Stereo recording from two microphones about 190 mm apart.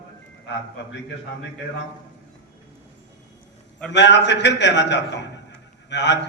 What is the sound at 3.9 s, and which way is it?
A man's voice, 65° left (ahead or behind).